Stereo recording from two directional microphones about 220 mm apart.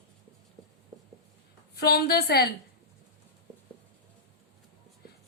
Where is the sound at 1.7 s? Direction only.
45° left (ahead or behind).